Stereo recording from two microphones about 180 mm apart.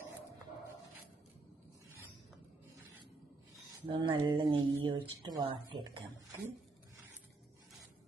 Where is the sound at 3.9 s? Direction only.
25° right (ahead or behind).